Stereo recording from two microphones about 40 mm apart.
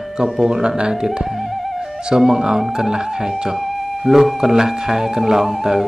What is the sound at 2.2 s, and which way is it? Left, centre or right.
Speech, centre.